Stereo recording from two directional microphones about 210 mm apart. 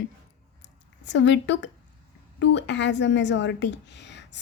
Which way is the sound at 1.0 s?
55° left (ahead or behind).